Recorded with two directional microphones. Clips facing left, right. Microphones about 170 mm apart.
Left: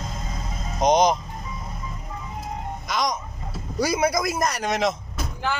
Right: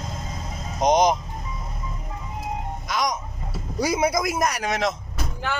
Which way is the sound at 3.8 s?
20° right (ahead or behind).